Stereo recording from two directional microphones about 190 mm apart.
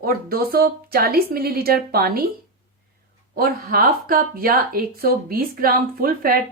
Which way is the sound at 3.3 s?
55° right (ahead or behind).